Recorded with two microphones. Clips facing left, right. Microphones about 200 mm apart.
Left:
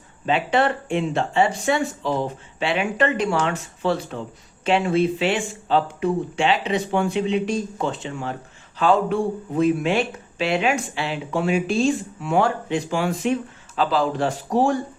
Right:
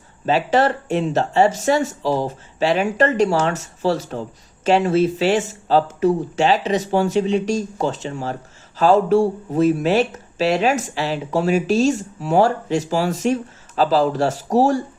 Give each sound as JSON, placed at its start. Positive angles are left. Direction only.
{"t": 0.3, "sound": "speech", "side_deg": -40}